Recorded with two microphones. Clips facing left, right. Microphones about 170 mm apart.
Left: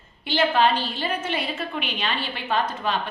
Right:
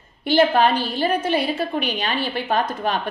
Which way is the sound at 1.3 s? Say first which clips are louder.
Right 7 dB; 35° right (ahead or behind).